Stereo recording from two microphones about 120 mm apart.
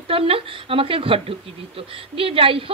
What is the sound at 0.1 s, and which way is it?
A woman's voice, 50° right (ahead or behind).